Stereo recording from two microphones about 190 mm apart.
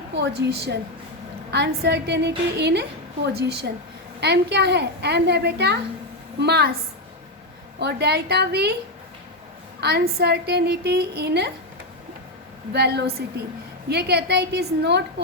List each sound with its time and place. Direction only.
0.1 s a woman's voice: 65° right (ahead or behind)
7.8 s a woman's voice: 60° right (ahead or behind)
9.8 s a woman's voice: 55° right (ahead or behind)
12.7 s a woman's voice: 60° right (ahead or behind)